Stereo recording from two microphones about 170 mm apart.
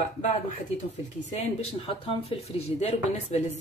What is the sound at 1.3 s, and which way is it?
Speech, 35° left (ahead or behind).